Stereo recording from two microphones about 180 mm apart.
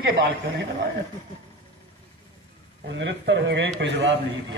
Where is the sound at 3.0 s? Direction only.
80° right.